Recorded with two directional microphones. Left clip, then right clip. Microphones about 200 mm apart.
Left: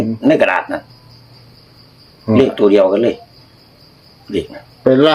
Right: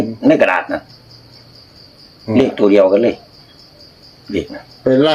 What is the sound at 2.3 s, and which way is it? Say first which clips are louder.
Speech: left 1 dB; 5° right (ahead or behind).